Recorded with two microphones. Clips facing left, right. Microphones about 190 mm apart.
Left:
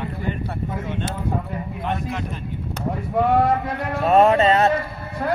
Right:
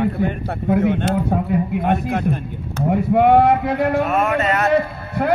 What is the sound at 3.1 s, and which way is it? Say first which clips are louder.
Speech: right 5 dB; 75° right (ahead or behind).